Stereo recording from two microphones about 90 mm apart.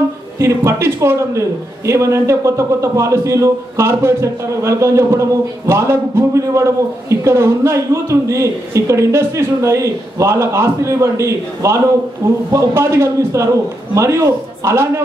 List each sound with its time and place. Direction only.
0.4 s a man's voice: 30° right (ahead or behind)